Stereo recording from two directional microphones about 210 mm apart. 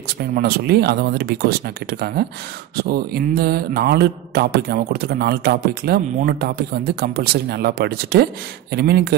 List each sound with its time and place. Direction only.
0.2 s mantra: 50° right (ahead or behind)